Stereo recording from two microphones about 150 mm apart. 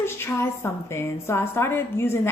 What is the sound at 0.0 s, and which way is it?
A woman's voice, 15° left (ahead or behind).